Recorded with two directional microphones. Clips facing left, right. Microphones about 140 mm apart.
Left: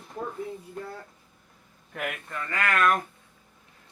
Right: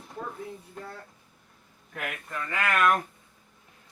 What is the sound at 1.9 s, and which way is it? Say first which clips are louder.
Speech: left 2 dB; centre (ahead or behind).